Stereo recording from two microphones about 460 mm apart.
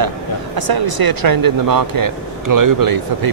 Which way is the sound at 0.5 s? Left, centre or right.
Right.